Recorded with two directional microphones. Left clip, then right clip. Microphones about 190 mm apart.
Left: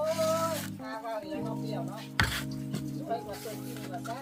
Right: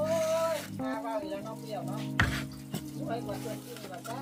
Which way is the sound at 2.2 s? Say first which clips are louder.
Left 1 dB; 40° left (ahead or behind).